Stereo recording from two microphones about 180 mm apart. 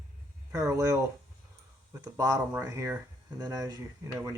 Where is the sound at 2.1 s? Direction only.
20° right (ahead or behind).